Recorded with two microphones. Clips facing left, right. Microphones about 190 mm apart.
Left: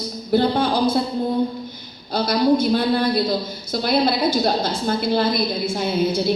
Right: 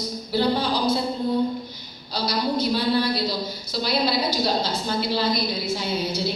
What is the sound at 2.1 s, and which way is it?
A woman's voice, 50° left (ahead or behind).